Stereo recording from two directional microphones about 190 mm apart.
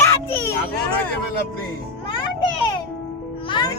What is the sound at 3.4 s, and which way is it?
Music, 25° left (ahead or behind).